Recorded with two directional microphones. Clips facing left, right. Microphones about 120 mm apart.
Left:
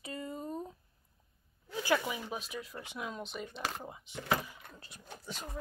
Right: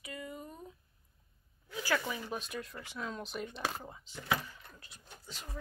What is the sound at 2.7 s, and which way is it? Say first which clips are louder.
Speech: left 1 dB; 20° left (ahead or behind).